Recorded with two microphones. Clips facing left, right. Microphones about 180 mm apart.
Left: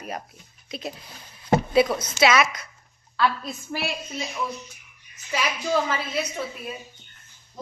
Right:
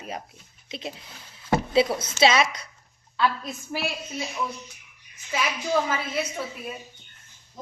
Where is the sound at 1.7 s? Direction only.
25° right (ahead or behind).